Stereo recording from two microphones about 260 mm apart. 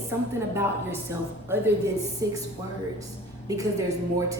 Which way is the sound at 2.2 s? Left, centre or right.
Centre.